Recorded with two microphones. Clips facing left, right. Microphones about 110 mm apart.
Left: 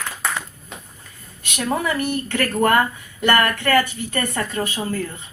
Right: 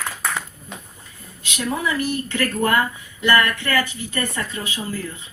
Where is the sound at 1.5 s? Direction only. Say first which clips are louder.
Left 1 dB; 55° left (ahead or behind).